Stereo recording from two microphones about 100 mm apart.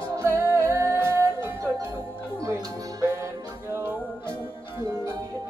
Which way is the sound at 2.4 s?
35° right (ahead or behind).